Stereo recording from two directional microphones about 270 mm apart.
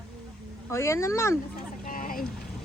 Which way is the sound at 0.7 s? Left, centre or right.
Centre.